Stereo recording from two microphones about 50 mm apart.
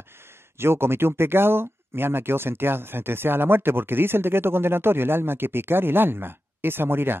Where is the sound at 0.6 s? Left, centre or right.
Right.